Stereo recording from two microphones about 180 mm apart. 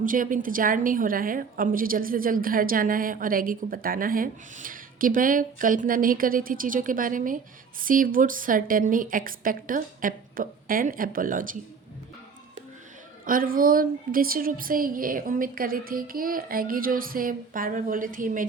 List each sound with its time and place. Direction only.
0.0 s a woman's voice: 50° right (ahead or behind)
13.2 s a woman's voice: 50° right (ahead or behind)